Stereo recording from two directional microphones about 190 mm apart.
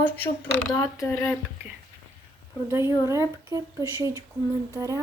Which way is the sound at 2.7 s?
15° right (ahead or behind).